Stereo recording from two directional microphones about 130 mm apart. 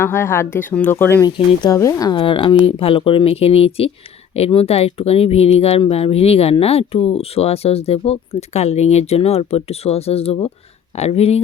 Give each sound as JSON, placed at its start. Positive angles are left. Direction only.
{"t": 0.0, "sound": "speech", "side_deg": 20}
{"t": 2.1, "sound": "speech", "side_deg": 40}